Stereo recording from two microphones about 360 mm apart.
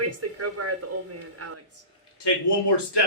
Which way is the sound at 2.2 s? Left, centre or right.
Left.